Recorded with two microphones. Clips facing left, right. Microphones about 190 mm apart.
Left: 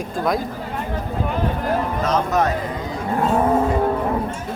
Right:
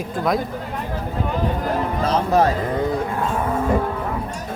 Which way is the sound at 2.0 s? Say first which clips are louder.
Right 4 dB; 30° right (ahead or behind).